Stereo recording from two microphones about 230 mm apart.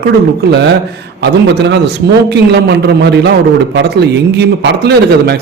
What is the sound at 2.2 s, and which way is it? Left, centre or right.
A man's voice, right.